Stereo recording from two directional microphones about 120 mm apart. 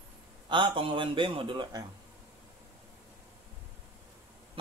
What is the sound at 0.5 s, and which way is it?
A man's voice, 45° right (ahead or behind).